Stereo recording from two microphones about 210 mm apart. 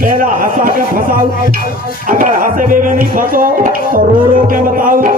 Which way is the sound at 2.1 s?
40° right (ahead or behind).